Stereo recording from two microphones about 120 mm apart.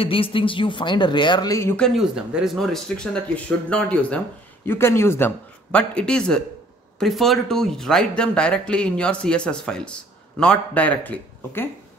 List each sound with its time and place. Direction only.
0.0 s speech: 50° left (ahead or behind); by 1.8 s 25° left (ahead or behind)
1.8 s speech: 5° right (ahead or behind)
4.6 s speech: 20° left (ahead or behind)
5.7 s speech: 10° left (ahead or behind)